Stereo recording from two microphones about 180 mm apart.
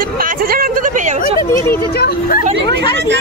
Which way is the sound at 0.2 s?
55° right (ahead or behind).